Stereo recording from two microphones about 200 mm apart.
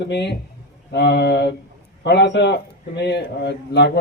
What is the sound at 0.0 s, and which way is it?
A man's voice, 60° left (ahead or behind).